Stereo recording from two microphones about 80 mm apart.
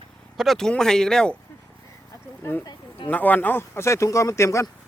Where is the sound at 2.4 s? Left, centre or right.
Left.